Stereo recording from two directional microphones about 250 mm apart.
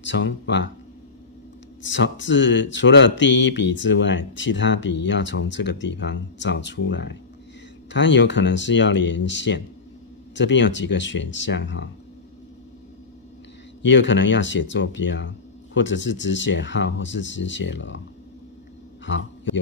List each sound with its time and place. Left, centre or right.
0.0 s speech: left
1.8 s speech: left
13.8 s speech: left
19.0 s a man's voice: left